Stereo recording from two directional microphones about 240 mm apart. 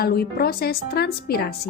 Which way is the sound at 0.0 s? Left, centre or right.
Left.